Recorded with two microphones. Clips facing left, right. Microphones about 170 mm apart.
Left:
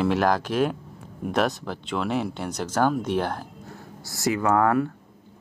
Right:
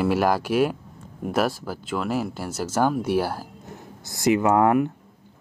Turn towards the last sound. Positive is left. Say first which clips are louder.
# right 2 dB
turn(degrees=-20)  # may be behind; listen again after turning